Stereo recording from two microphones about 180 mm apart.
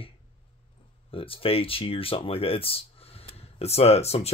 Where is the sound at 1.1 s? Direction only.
30° left (ahead or behind).